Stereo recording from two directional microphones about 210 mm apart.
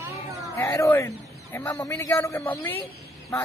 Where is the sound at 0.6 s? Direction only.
10° left (ahead or behind).